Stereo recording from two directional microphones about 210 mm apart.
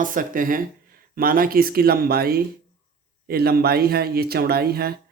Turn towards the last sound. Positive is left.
turn(degrees=-45)  # may be behind; listen again after turning